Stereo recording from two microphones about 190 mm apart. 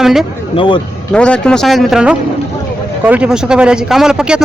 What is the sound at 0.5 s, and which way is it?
Speech, 25° left (ahead or behind).